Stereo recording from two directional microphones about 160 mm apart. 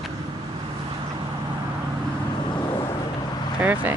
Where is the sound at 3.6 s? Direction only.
10° right (ahead or behind).